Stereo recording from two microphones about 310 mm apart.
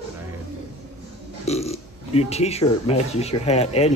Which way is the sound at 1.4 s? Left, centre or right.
Centre.